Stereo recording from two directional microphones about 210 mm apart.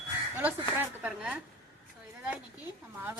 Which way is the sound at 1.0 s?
5° right (ahead or behind).